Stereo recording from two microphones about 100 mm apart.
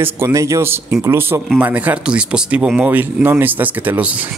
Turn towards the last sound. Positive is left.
turn(degrees=-15)  # may be behind; listen again after turning